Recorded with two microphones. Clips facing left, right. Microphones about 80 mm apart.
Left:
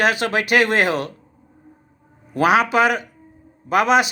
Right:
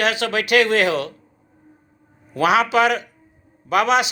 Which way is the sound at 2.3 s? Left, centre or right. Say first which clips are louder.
Left 1 dB; left.